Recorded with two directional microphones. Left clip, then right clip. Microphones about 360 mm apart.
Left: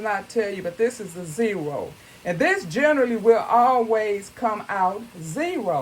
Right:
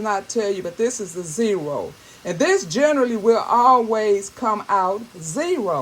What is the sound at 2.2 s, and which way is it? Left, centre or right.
Speech, centre.